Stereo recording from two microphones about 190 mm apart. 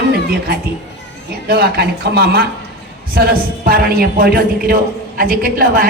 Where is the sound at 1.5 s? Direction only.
55° right (ahead or behind).